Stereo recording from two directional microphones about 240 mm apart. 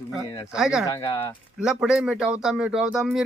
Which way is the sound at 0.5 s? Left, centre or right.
Centre.